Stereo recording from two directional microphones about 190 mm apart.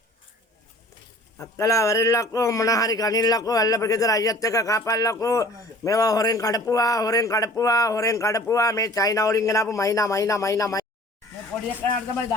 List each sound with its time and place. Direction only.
1.4 s speech: 15° left (ahead or behind)